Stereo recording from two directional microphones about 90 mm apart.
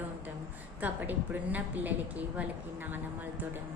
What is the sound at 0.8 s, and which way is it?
A woman's voice, 20° right (ahead or behind).